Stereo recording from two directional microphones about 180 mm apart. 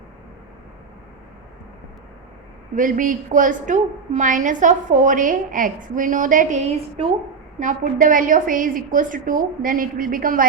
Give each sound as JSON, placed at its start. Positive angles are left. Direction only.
{"t": 2.7, "sound": "a woman's voice", "side_deg": -45}